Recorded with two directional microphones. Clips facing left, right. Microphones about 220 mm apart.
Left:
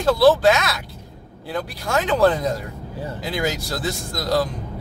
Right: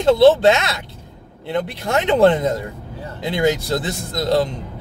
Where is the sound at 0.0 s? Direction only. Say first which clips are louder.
Right 3 dB; 25° right (ahead or behind).